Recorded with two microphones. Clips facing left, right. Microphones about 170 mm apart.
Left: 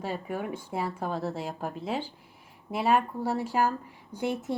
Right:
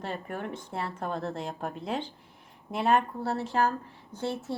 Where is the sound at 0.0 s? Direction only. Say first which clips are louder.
Left 2 dB; 5° left (ahead or behind).